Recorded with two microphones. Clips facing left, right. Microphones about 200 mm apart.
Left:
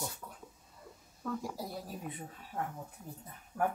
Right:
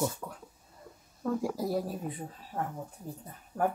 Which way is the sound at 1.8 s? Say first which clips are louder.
Right 6 dB; 30° right (ahead or behind).